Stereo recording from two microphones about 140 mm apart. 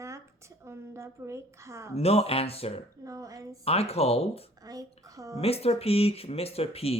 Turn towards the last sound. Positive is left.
turn(degrees=45)  # may be behind; listen again after turning